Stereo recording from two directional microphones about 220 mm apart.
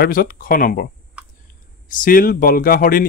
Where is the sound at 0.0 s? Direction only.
40° left (ahead or behind).